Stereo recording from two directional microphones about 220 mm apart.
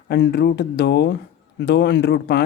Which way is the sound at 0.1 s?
50° left (ahead or behind).